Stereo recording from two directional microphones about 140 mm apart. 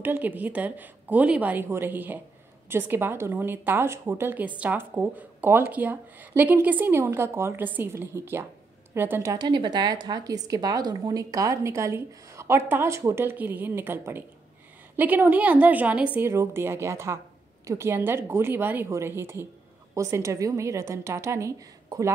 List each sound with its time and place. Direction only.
0.0 s a woman's voice: 15° right (ahead or behind)